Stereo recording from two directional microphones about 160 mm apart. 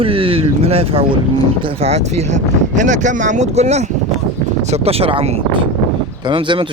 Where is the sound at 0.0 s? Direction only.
35° right (ahead or behind).